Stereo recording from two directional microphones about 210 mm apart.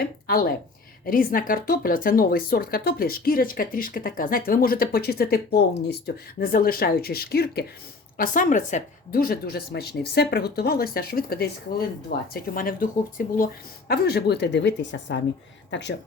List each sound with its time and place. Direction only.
0.0 s speech: 45° left (ahead or behind)
15.7 s speech: 60° left (ahead or behind)